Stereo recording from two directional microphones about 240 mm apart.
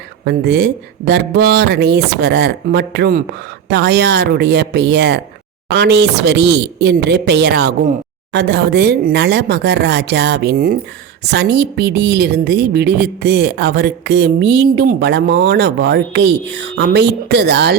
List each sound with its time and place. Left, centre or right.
0.3 s a woman's voice: right